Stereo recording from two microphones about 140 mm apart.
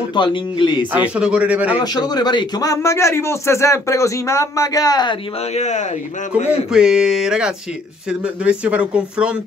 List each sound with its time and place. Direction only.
0.1 s speech: 35° left (ahead or behind)
0.9 s speech: 10° right (ahead or behind)
1.8 s a man's voice: 30° left (ahead or behind)
5.5 s speech: 55° left (ahead or behind)
6.7 s speech: 5° right (ahead or behind)